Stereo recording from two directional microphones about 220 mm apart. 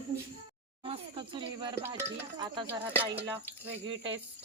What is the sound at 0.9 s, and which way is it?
Speech, 25° right (ahead or behind).